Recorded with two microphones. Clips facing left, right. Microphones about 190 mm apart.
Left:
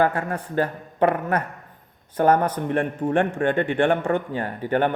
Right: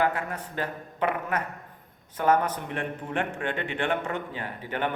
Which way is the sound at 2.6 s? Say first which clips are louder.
Left 10 dB; 45° left (ahead or behind).